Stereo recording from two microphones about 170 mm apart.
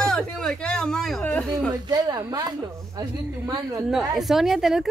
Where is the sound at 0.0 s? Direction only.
5° left (ahead or behind).